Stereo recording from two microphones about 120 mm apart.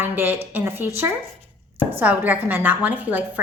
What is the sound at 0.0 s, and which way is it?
A woman's voice, 15° right (ahead or behind).